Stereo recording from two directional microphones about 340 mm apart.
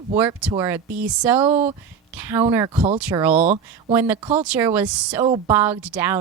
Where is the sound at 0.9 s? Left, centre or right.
Right.